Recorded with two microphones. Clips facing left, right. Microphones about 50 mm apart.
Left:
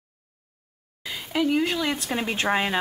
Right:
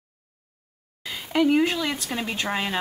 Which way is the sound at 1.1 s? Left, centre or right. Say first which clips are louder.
Right 3 dB; centre.